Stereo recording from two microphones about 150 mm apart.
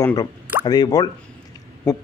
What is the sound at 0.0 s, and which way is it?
A man's voice, 25° left (ahead or behind).